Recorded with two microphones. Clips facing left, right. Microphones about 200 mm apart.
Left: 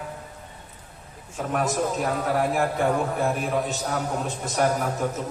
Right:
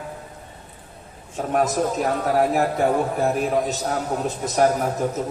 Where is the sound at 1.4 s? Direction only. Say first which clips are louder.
Right 4 dB; 40° right (ahead or behind).